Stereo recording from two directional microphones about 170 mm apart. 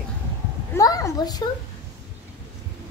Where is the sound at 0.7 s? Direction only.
20° left (ahead or behind).